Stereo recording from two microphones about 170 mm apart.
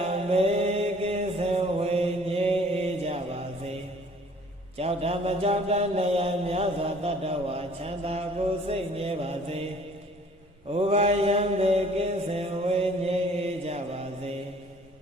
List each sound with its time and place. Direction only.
0.0 s mantra: 40° right (ahead or behind)
4.8 s mantra: 35° right (ahead or behind)
10.7 s mantra: 35° right (ahead or behind)